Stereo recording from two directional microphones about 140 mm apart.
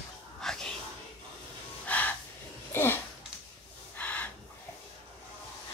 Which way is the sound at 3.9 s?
10° left (ahead or behind).